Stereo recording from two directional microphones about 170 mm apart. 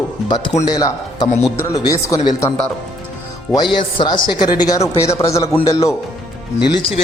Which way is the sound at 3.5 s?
25° left (ahead or behind).